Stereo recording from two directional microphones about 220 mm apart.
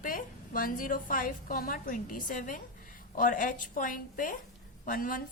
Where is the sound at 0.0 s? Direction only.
40° left (ahead or behind).